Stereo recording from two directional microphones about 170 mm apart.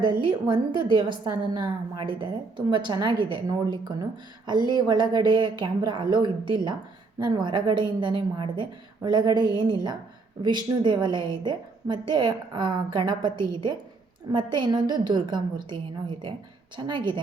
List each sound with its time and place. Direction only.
0.0 s a woman's voice: 30° right (ahead or behind)